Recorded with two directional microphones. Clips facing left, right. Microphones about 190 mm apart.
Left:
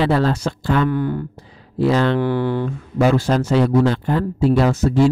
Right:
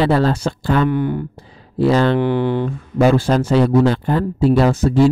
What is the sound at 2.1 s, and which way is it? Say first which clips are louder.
Speech: right 2 dB; 20° right (ahead or behind).